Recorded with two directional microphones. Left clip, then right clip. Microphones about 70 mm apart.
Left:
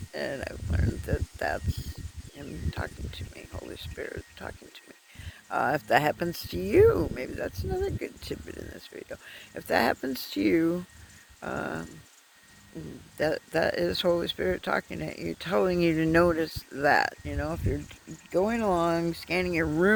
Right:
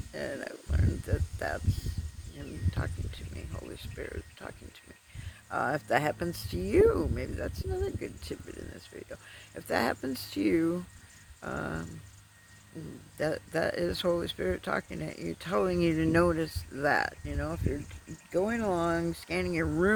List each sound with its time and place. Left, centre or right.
0.1 s a sound: left
2.6 s speech: centre
5.5 s speech: left; by 8.4 s centre
8.5 s speech: left
11.3 s a sound: left
13.1 s speech: left